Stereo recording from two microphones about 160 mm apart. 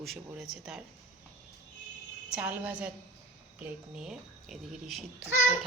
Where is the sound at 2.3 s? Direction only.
10° right (ahead or behind).